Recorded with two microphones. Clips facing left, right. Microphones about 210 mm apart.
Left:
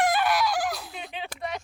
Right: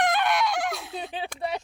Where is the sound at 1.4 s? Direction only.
30° right (ahead or behind).